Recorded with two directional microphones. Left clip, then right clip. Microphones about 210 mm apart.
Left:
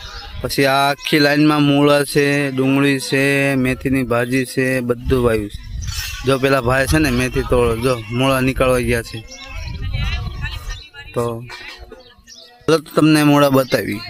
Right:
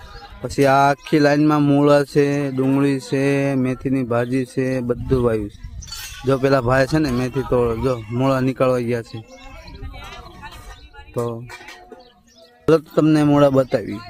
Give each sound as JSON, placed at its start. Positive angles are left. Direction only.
{"t": 0.4, "sound": "speech", "side_deg": 0}
{"t": 9.9, "sound": "a sound", "side_deg": -40}
{"t": 11.1, "sound": "speech", "side_deg": 0}
{"t": 12.6, "sound": "a man's voice", "side_deg": 5}